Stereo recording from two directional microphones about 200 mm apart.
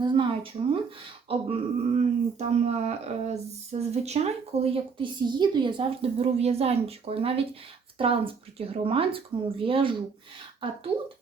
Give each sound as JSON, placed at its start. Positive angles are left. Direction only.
{"t": 0.0, "sound": "speech", "side_deg": -25}
{"t": 1.3, "sound": "speech", "side_deg": -30}